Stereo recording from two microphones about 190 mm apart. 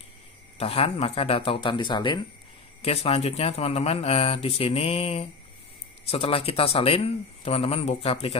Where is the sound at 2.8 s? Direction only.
30° left (ahead or behind).